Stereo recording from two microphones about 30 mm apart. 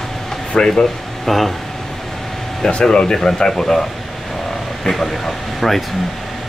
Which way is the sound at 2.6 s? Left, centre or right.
Left.